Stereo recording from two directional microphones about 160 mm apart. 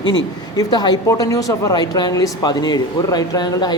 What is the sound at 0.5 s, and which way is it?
A woman's voice, 25° left (ahead or behind).